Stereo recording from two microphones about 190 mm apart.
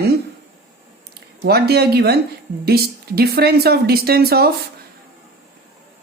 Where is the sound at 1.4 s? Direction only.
55° right (ahead or behind).